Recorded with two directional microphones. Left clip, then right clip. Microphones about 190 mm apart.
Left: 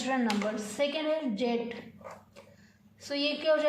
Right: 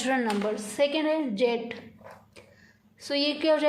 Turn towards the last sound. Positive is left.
turn(degrees=-55)  # may be behind; listen again after turning